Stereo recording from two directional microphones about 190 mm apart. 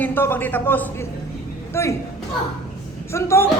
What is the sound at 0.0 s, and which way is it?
Speech, 10° left (ahead or behind).